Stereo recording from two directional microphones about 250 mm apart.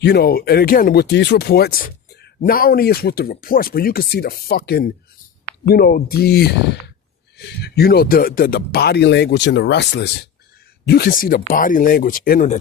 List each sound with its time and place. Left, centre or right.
0.0 s speech: left